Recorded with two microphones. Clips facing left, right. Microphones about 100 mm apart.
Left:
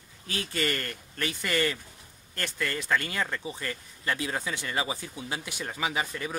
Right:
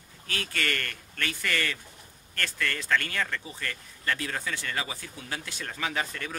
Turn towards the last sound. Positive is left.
turn(degrees=15)  # may be behind; listen again after turning